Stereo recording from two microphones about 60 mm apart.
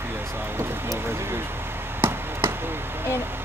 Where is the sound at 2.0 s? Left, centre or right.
Right.